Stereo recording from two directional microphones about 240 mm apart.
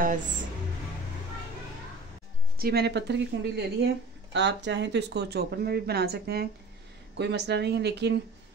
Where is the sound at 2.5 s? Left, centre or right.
Right.